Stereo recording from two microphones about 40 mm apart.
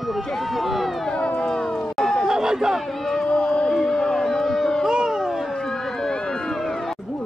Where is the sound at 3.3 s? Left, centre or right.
Left.